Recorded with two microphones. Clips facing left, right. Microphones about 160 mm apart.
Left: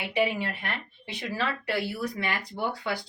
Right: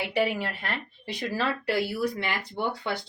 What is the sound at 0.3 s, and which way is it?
Speech, 40° right (ahead or behind).